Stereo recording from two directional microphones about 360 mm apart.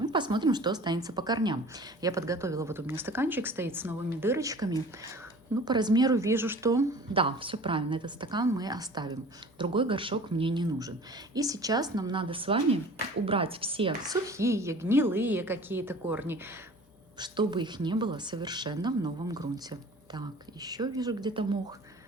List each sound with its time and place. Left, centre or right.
0.0 s speech: centre